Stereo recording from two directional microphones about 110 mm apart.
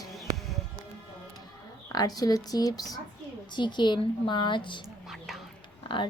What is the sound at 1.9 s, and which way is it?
A woman's voice, 35° left (ahead or behind).